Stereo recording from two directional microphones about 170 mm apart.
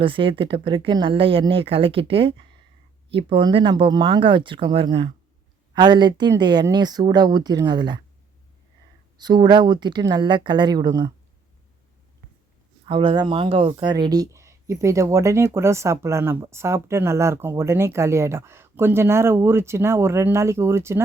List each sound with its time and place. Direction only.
0.0 s speech: 30° right (ahead or behind)
9.1 s speech: 25° right (ahead or behind)
12.8 s speech: 30° right (ahead or behind); by 21.0 s 15° right (ahead or behind)